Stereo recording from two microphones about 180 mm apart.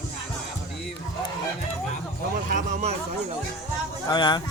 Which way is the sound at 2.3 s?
50° right (ahead or behind).